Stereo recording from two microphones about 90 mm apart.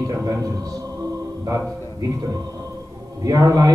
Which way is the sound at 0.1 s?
40° right (ahead or behind).